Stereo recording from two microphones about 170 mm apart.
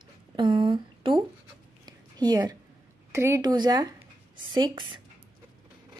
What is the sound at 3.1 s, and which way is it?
Speech, 15° right (ahead or behind).